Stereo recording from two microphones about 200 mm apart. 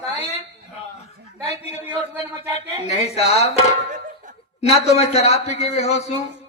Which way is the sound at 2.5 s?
30° left (ahead or behind).